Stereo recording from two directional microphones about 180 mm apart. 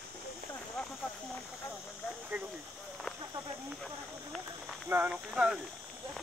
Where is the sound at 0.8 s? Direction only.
Centre (ahead or behind).